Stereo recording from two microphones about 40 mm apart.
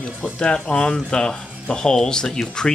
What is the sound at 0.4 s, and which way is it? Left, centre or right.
Speech, left.